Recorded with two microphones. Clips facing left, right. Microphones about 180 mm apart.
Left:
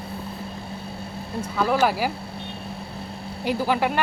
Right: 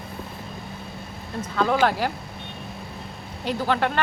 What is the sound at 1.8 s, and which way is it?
Speech, 5° left (ahead or behind).